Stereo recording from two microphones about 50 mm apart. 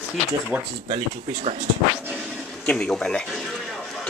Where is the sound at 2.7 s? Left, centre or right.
Left.